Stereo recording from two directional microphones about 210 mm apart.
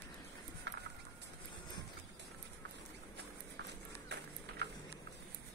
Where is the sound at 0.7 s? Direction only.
55° right (ahead or behind).